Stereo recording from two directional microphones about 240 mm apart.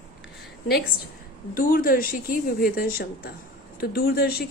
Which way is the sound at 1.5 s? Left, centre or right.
Left.